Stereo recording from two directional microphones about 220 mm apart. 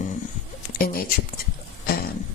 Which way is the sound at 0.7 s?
40° left (ahead or behind).